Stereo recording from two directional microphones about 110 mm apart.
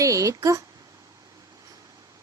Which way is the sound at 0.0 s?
30° right (ahead or behind).